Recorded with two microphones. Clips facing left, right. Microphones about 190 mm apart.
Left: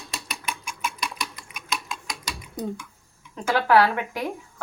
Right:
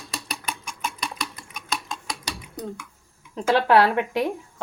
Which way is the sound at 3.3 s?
25° right (ahead or behind).